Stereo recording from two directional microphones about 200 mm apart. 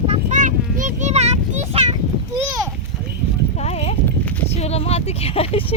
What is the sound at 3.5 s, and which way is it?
Speech, 30° left (ahead or behind).